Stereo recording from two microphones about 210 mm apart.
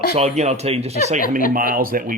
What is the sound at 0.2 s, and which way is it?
Speech, 30° right (ahead or behind).